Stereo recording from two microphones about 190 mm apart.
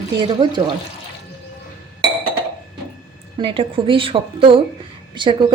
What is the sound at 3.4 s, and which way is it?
A woman's voice, 25° right (ahead or behind).